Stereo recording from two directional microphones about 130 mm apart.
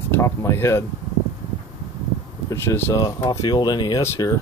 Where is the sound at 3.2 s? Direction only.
30° left (ahead or behind).